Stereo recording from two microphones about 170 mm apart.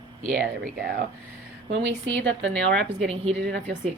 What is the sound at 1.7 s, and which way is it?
Speech, 90° right.